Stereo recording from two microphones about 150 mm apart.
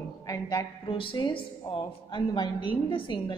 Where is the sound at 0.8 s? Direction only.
35° left (ahead or behind).